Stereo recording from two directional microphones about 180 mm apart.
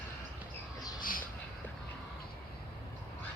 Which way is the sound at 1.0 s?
50° left (ahead or behind).